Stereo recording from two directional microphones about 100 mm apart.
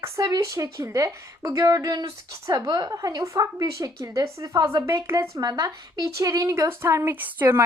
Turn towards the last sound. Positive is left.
turn(degrees=-20)  # may be behind; listen again after turning